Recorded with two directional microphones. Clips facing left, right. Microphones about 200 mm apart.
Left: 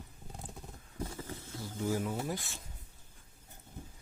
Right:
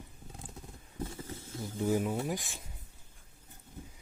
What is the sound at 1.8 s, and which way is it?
Speech, 20° right (ahead or behind).